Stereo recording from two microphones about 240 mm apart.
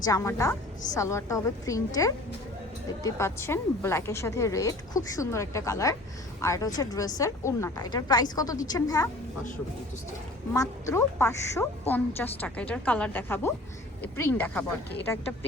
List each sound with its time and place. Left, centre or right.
0.0 s a woman's voice: centre
10.5 s a woman's voice: centre